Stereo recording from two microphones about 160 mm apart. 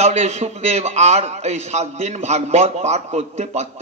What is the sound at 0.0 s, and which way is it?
A man's voice, 45° right (ahead or behind).